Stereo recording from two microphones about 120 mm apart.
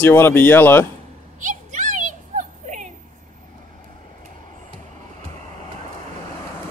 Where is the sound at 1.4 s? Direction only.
90° right.